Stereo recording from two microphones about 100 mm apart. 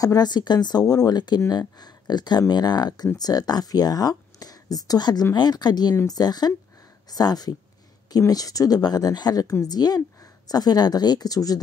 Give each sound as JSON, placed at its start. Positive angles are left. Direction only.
{"t": 0.0, "sound": "speech", "side_deg": 40}